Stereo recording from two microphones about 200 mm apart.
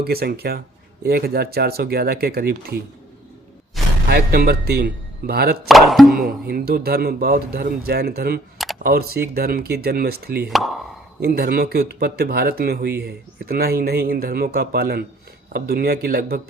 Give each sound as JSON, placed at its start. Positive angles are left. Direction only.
{"t": 0.0, "sound": "speech", "side_deg": -50}
{"t": 4.1, "sound": "speech", "side_deg": -50}
{"t": 5.6, "sound": "speech", "side_deg": 0}
{"t": 6.1, "sound": "speech", "side_deg": -45}
{"t": 8.5, "sound": "camera", "side_deg": 0}
{"t": 8.8, "sound": "speech", "side_deg": -50}
{"t": 10.5, "sound": "speech", "side_deg": 0}
{"t": 11.2, "sound": "speech", "side_deg": -50}